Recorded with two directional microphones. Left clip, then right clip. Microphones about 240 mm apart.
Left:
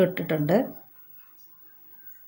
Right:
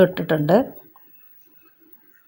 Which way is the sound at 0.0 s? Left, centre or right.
Right.